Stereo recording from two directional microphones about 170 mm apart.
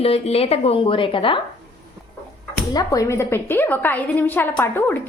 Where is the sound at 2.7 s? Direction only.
20° left (ahead or behind).